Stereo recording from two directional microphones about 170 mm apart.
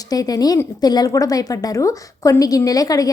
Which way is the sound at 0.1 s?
20° left (ahead or behind).